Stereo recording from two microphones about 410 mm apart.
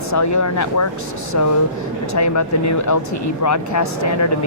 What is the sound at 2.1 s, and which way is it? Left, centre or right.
Speech, left.